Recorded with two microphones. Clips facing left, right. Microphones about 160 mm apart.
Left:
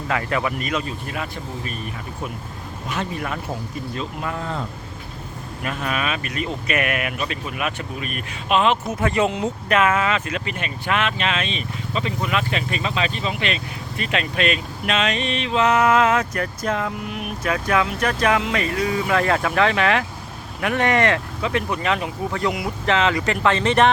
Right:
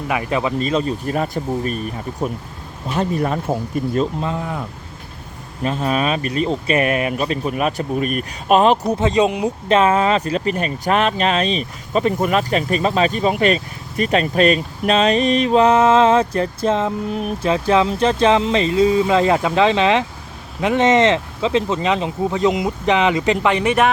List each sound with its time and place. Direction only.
0.1 s speech: 20° right (ahead or behind); by 1.8 s 40° right (ahead or behind)
2.9 s speech: 35° right (ahead or behind)
4.2 s speech: 20° right (ahead or behind)
5.6 s speech: 30° right (ahead or behind)
9.0 s speech: 20° right (ahead or behind)
9.7 s speech: 30° right (ahead or behind); by 23.9 s 10° right (ahead or behind)